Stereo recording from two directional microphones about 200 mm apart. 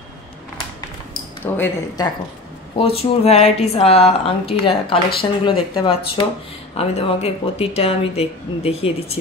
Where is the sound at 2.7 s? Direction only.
30° left (ahead or behind).